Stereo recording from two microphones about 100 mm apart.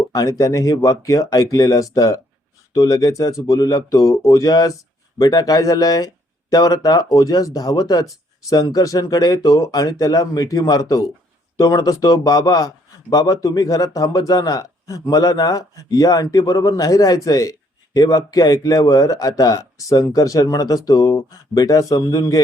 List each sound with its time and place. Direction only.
0.1 s a man's voice: 35° left (ahead or behind)